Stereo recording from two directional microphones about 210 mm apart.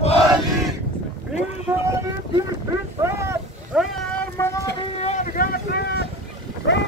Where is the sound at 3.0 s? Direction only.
15° right (ahead or behind).